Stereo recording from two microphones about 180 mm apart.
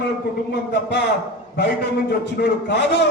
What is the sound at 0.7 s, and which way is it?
A man's voice, 70° left (ahead or behind).